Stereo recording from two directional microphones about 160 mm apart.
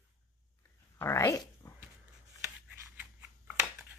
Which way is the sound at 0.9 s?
15° left (ahead or behind).